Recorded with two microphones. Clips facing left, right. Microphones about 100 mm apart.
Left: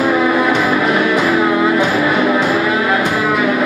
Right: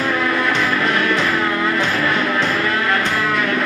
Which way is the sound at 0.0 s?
15° left (ahead or behind).